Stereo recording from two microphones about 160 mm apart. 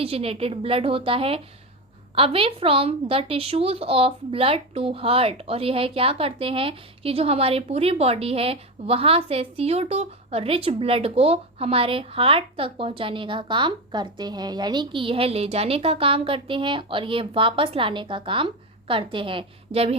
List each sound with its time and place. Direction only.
0.0 s a woman's voice: 40° right (ahead or behind)